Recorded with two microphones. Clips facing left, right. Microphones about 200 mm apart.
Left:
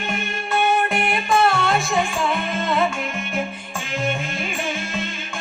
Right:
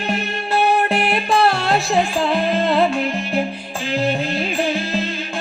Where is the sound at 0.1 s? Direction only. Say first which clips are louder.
Right 4 dB; 35° right (ahead or behind).